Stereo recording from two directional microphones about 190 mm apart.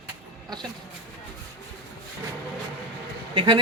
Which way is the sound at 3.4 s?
25° right (ahead or behind).